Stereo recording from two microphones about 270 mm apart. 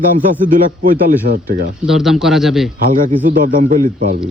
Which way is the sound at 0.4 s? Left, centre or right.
Right.